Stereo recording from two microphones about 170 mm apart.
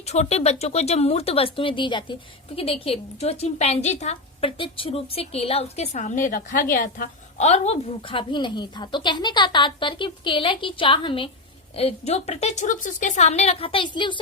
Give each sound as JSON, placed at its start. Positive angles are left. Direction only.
{"t": 0.0, "sound": "a woman's voice", "side_deg": 40}